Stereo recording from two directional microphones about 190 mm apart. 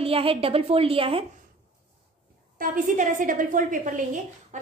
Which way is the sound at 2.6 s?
45° right (ahead or behind).